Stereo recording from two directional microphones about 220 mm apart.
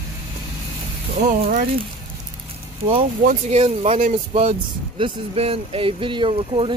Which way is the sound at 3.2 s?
25° right (ahead or behind).